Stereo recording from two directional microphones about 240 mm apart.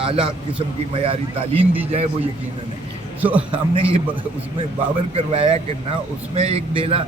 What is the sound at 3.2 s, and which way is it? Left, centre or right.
Speech, centre.